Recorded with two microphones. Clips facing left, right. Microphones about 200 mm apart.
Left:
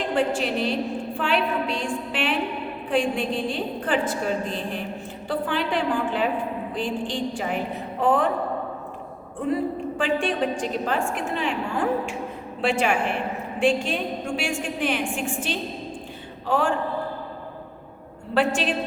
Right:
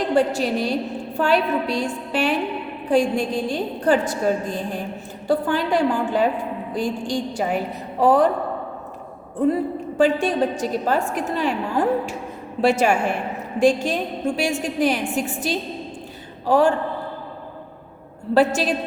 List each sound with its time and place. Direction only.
0.1 s a woman's voice: 40° right (ahead or behind)
10.0 s a woman's voice: 40° right (ahead or behind)
18.3 s a woman's voice: 40° right (ahead or behind)